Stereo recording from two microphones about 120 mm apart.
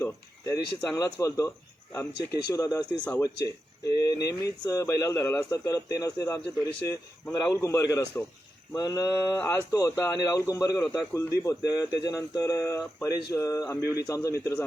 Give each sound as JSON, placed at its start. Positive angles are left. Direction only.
{"t": 0.0, "sound": "a sound", "side_deg": 25}
{"t": 0.9, "sound": "speech", "side_deg": 25}
{"t": 9.4, "sound": "speech", "side_deg": 25}